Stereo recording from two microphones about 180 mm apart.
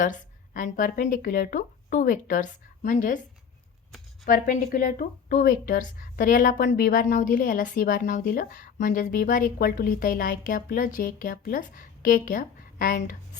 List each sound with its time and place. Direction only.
0.0 s speech: 45° left (ahead or behind)
4.3 s a woman's voice: 50° left (ahead or behind)